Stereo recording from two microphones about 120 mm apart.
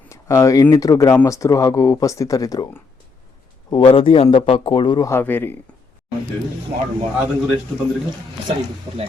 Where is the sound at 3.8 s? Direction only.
50° left (ahead or behind).